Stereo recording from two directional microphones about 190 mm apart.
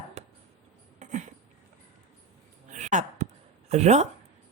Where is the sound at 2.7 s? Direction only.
40° right (ahead or behind).